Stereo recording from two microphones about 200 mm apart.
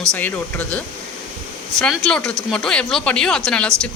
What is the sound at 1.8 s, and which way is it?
Speech, centre (ahead or behind).